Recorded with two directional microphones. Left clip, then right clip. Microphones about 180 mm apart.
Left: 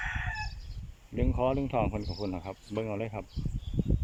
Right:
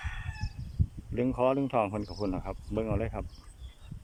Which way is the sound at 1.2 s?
5° right (ahead or behind).